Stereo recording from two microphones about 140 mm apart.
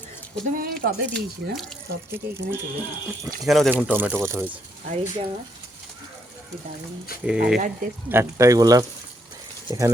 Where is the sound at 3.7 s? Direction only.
10° right (ahead or behind).